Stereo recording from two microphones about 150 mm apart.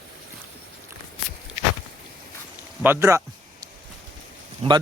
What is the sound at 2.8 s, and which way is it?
Speech, 15° right (ahead or behind).